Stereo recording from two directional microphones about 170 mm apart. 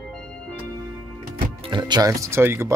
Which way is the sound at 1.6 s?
25° right (ahead or behind).